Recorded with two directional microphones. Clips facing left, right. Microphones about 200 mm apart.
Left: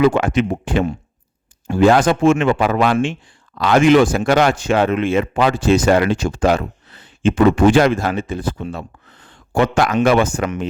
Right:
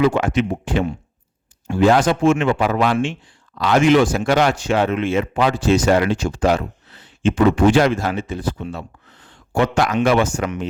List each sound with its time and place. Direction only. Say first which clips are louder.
0.0 s speech: left 2 dB; 55° left (ahead or behind)